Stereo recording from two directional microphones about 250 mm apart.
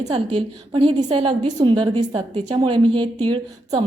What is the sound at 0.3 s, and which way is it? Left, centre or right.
A woman's voice, centre.